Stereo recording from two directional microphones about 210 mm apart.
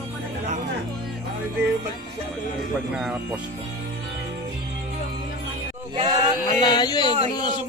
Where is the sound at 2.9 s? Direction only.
5° right (ahead or behind).